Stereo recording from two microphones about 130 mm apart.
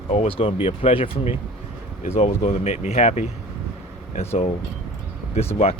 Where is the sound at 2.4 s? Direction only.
55° left (ahead or behind).